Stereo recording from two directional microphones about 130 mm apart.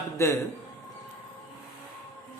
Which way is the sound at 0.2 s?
20° left (ahead or behind).